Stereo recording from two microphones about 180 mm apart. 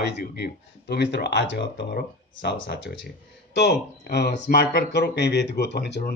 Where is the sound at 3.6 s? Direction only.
65° left (ahead or behind).